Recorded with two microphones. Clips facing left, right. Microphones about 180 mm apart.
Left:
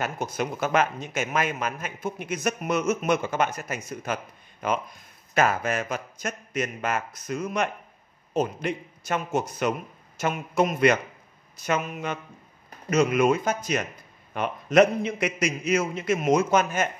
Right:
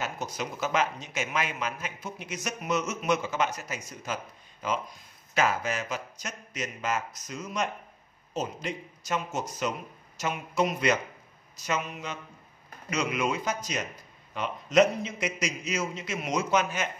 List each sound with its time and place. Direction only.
0.0 s a man's voice: 55° left (ahead or behind)